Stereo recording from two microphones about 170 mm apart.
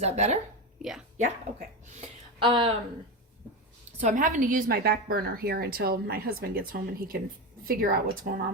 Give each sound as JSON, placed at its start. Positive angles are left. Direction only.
{"t": 0.0, "sound": "speech", "side_deg": -40}
{"t": 0.8, "sound": "speech", "side_deg": -5}
{"t": 2.0, "sound": "speech", "side_deg": -30}
{"t": 4.0, "sound": "a woman's voice", "side_deg": -50}